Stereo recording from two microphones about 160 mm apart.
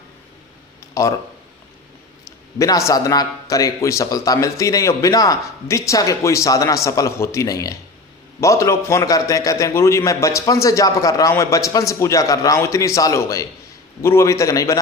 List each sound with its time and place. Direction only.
1.0 s speech: 20° left (ahead or behind)
2.6 s speech: 20° left (ahead or behind)